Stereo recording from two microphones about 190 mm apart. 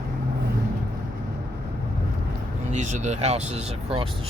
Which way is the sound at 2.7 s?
40° right (ahead or behind).